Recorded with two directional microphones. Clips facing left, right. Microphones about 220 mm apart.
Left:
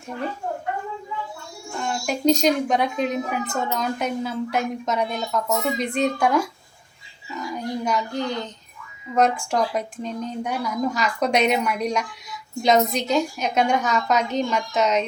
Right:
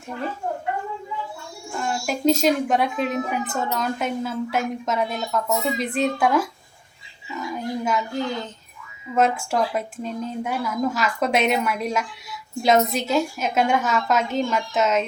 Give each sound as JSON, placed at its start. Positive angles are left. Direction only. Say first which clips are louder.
{"t": 1.8, "sound": "a woman's voice", "louder": "even", "side_deg": 0}